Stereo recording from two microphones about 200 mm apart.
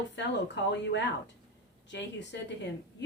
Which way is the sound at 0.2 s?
60° left (ahead or behind).